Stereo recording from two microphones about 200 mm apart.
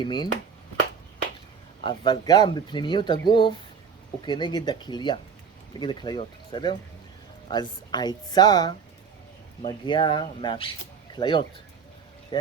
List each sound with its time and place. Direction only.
0.0 s speech: 20° left (ahead or behind)
1.8 s speech: 25° left (ahead or behind)